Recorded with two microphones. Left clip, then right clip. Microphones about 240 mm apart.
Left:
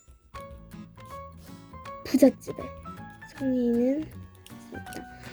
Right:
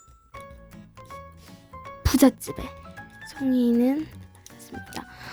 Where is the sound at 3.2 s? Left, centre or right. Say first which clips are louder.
Right 3 dB; right.